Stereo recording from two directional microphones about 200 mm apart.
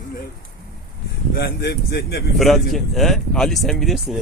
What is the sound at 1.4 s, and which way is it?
Speech, 55° left (ahead or behind).